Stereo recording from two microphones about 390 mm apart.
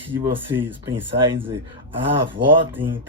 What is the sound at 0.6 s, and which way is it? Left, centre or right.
Speech, centre.